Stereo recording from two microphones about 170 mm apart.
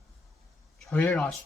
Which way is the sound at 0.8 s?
10° left (ahead or behind).